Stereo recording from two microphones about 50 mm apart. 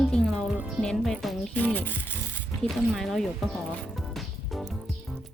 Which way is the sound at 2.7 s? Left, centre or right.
Centre.